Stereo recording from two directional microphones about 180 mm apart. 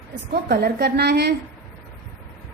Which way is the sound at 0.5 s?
65° right (ahead or behind).